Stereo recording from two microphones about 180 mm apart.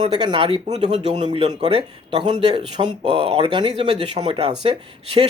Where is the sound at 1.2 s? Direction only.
25° right (ahead or behind).